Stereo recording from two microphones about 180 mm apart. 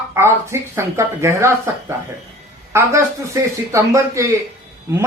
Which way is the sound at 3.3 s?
15° right (ahead or behind).